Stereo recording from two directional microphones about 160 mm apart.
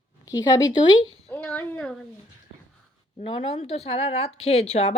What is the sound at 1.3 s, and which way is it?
Speech, 10° left (ahead or behind).